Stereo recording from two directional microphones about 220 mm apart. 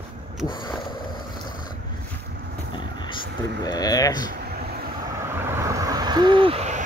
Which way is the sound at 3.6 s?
15° left (ahead or behind).